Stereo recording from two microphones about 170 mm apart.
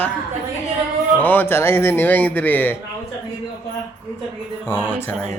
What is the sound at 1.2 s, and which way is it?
A man's voice, 10° left (ahead or behind).